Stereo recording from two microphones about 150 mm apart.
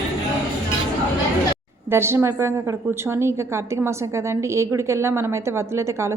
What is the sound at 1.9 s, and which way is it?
A woman's voice, 15° right (ahead or behind).